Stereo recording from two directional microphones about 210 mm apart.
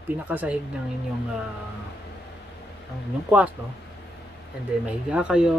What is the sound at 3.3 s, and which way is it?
Speech, 5° right (ahead or behind).